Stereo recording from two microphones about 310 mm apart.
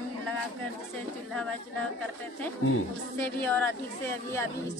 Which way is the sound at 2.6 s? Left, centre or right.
Left.